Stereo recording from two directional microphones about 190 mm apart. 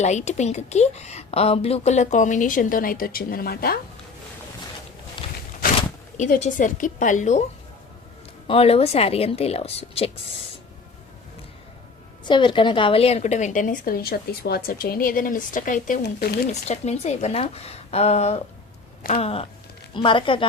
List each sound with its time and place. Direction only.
0.0 s a woman's voice: 35° left (ahead or behind); by 3.8 s 50° left (ahead or behind)
5.2 s walk: 25° left (ahead or behind)
6.1 s a woman's voice: 40° left (ahead or behind)
8.4 s a woman's voice: 30° left (ahead or behind)
12.2 s a woman's voice: 25° left (ahead or behind); by 16.5 s 55° left (ahead or behind)
16.5 s a woman's voice: 35° left (ahead or behind)